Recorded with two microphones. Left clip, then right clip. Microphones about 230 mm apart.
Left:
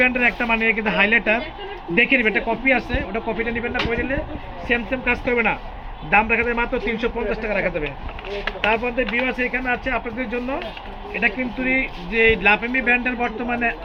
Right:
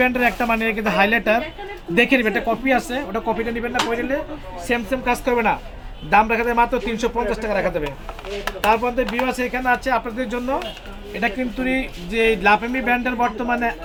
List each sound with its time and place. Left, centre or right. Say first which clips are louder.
0.0 s speech: even; centre